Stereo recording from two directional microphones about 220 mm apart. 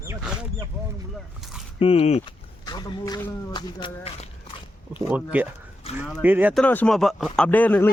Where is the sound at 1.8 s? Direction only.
25° left (ahead or behind).